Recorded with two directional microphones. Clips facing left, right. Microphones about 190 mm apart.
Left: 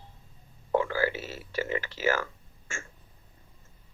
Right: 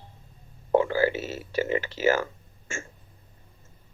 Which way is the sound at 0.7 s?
25° right (ahead or behind).